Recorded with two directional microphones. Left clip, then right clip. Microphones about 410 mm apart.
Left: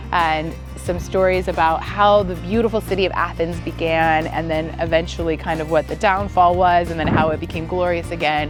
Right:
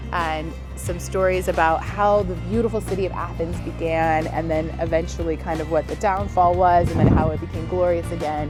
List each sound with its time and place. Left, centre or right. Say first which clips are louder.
0.1 s music: left 6 dB; left
0.9 s speech: left 4 dB; centre